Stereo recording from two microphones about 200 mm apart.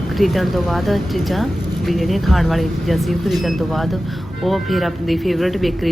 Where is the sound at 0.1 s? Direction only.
Centre (ahead or behind).